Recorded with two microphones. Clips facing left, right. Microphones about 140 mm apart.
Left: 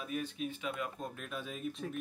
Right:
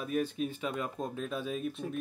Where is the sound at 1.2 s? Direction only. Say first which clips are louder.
Right 7 dB; 20° right (ahead or behind).